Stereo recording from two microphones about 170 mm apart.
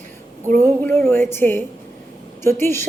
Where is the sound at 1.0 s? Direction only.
10° left (ahead or behind).